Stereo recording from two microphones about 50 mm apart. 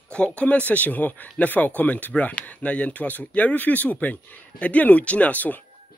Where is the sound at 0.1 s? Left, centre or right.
Left.